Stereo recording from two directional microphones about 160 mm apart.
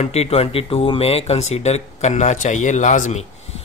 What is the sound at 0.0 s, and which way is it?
Speech, 40° left (ahead or behind).